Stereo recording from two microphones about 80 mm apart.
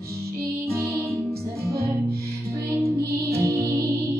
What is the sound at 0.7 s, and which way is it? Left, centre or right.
Music, right.